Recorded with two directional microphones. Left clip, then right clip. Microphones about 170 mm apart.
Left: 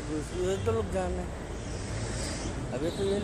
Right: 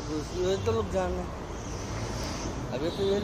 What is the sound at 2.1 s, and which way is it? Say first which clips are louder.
Boat: right 1 dB; 10° left (ahead or behind).